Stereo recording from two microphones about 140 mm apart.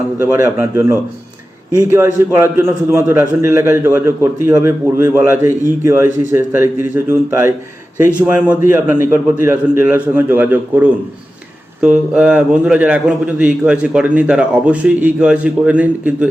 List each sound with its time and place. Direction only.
0.2 s a man's voice: 20° right (ahead or behind)